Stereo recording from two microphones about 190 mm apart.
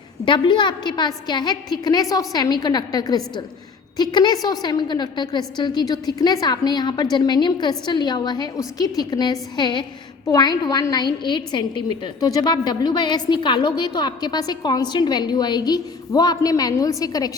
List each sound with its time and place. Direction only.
0.3 s a woman's voice: 25° left (ahead or behind)